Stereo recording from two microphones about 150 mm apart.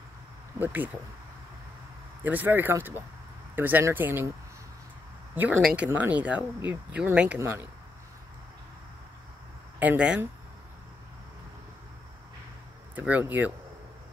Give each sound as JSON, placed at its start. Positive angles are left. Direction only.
{"t": 0.6, "sound": "speech", "side_deg": -10}
{"t": 2.2, "sound": "speech", "side_deg": -10}
{"t": 5.3, "sound": "speech", "side_deg": -10}
{"t": 9.8, "sound": "speech", "side_deg": -10}
{"t": 12.9, "sound": "speech", "side_deg": -10}